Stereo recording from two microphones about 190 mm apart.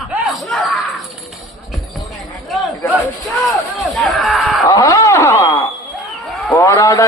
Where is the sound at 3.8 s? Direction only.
Centre (ahead or behind).